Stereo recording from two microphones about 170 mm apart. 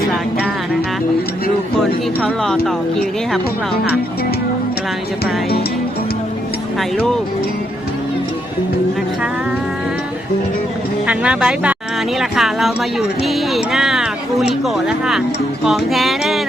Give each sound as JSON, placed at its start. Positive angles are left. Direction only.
{"t": 1.8, "sound": "speech", "side_deg": 0}
{"t": 5.2, "sound": "music", "side_deg": 65}
{"t": 11.0, "sound": "speech", "side_deg": -5}